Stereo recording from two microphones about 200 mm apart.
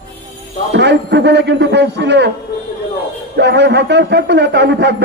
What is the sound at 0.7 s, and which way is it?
A man's voice, 60° right (ahead or behind).